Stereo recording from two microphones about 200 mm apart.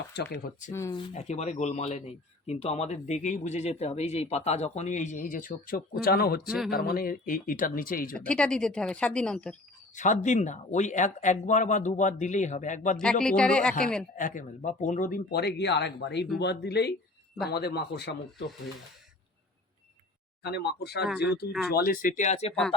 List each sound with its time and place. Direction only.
0.1 s speech: 55° left (ahead or behind)
0.7 s speech: 15° left (ahead or behind)
1.1 s speech: 35° left (ahead or behind); by 6.4 s 50° left (ahead or behind)
6.4 s speech: centre (ahead or behind)
6.7 s speech: 50° left (ahead or behind)
8.1 s speech: 5° left (ahead or behind)
9.9 s speech: 40° left (ahead or behind)
13.0 s speech: 5° left (ahead or behind)
14.2 s speech: 40° left (ahead or behind)
20.4 s speech: 55° left (ahead or behind); by 22.5 s 35° left (ahead or behind)